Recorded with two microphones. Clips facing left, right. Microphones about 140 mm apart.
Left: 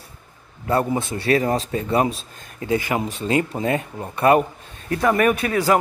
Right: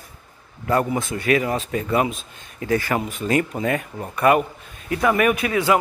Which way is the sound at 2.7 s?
20° left (ahead or behind).